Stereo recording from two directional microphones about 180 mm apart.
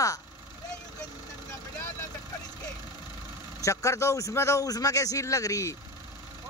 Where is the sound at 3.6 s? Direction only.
15° left (ahead or behind).